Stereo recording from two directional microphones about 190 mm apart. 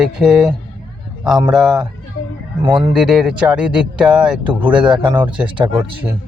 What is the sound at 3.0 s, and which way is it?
Speech, 5° right (ahead or behind).